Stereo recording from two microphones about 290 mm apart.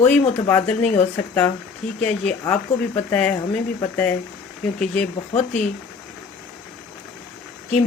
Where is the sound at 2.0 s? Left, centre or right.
Centre.